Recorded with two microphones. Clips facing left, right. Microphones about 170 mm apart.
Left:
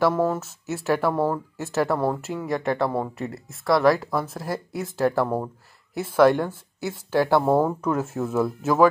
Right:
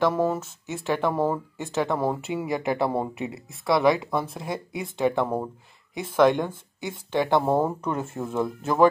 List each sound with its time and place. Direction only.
0.0 s speech: centre (ahead or behind)
2.8 s speech: 20° right (ahead or behind)
3.2 s speech: centre (ahead or behind)